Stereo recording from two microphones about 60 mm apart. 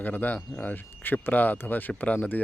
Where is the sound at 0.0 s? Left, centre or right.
Left.